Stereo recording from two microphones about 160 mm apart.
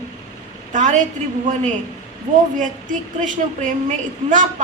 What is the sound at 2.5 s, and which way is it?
Speech, 55° right (ahead or behind).